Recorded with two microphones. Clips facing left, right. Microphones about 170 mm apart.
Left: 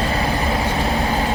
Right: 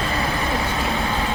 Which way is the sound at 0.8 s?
35° left (ahead or behind).